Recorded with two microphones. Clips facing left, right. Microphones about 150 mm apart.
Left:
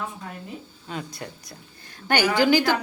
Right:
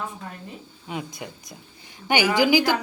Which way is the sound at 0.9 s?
15° right (ahead or behind).